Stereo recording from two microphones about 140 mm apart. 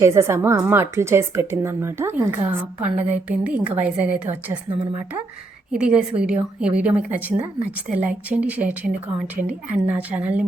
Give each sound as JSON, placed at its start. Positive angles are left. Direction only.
{"t": 0.0, "sound": "a woman's voice", "side_deg": -20}
{"t": 5.7, "sound": "a woman's voice", "side_deg": -5}